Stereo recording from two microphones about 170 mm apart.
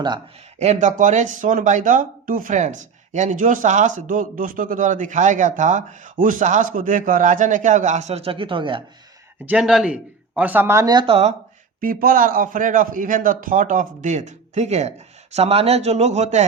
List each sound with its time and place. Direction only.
0.6 s speech: 45° right (ahead or behind)
9.5 s speech: 5° right (ahead or behind); by 11.3 s 35° right (ahead or behind)
11.8 s speech: 55° right (ahead or behind)